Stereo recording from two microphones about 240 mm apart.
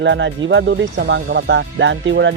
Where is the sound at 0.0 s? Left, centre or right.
Right.